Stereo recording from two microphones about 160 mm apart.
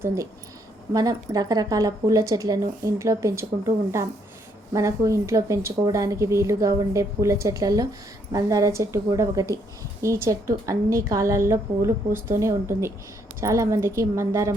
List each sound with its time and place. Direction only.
0.9 s speech: 25° right (ahead or behind)
4.7 s speech: 20° right (ahead or behind)